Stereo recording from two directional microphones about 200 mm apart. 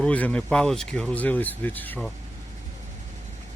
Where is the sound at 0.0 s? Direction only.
5° left (ahead or behind).